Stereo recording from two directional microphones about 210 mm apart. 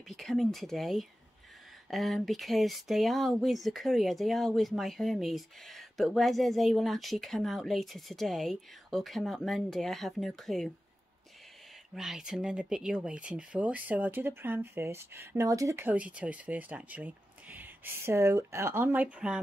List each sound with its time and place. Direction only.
0.1 s speech: centre (ahead or behind)
11.9 s speech: centre (ahead or behind)